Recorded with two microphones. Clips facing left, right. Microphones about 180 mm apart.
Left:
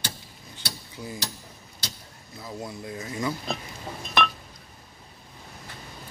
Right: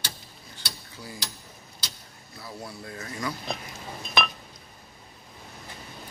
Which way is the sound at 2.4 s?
20° left (ahead or behind).